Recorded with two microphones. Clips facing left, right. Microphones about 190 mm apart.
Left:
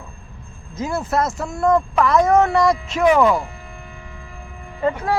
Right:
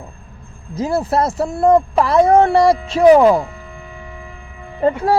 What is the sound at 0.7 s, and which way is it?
Speech, 35° right (ahead or behind).